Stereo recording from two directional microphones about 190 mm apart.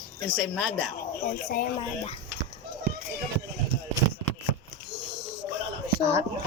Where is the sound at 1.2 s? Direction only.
50° left (ahead or behind).